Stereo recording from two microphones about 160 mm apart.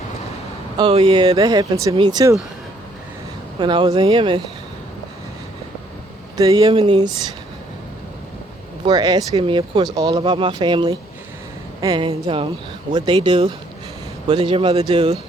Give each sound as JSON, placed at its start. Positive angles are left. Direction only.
{"t": 0.8, "sound": "speech", "side_deg": -35}
{"t": 3.6, "sound": "speech", "side_deg": -30}
{"t": 6.3, "sound": "speech", "side_deg": -25}
{"t": 8.8, "sound": "speech", "side_deg": -25}